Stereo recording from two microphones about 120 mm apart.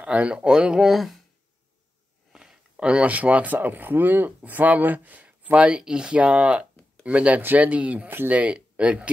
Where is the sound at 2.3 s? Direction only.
5° right (ahead or behind).